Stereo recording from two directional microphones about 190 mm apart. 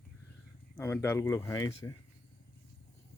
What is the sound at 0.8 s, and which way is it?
Speech, 15° left (ahead or behind).